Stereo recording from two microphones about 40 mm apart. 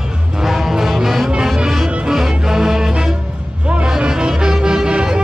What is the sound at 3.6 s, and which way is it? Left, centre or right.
Music, right.